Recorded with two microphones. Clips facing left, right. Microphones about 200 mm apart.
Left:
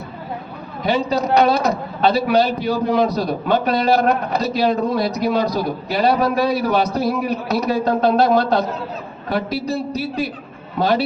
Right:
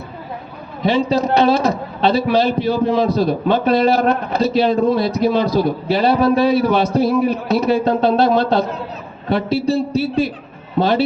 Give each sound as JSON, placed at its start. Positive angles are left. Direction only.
{"t": 0.9, "sound": "a man's voice", "side_deg": -30}